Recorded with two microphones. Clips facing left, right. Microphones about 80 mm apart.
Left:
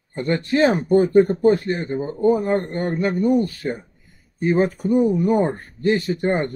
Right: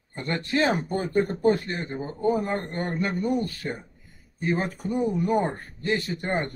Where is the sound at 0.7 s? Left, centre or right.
Centre.